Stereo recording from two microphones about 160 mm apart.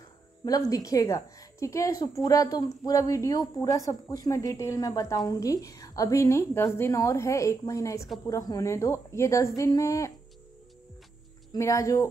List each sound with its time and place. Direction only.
0.5 s a woman's voice: 25° left (ahead or behind)
11.5 s a woman's voice: 20° left (ahead or behind)